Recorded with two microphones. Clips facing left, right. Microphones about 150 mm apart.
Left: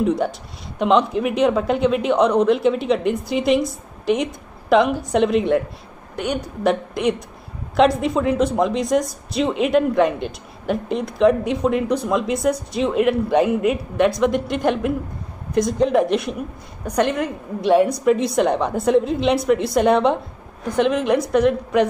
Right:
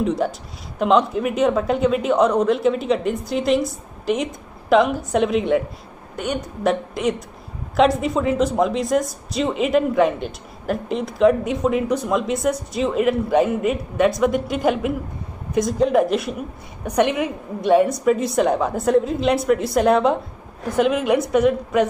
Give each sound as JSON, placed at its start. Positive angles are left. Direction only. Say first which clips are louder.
{"t": 0.0, "sound": "a woman's voice", "louder": "left 1 dB", "side_deg": 0}